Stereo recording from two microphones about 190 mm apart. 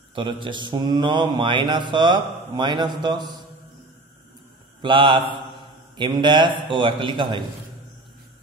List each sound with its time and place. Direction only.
0.1 s mantra: 25° right (ahead or behind)
4.8 s mantra: 25° right (ahead or behind)